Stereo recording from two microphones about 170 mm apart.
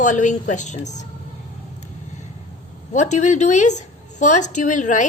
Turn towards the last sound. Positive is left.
turn(degrees=45)  # may be behind; listen again after turning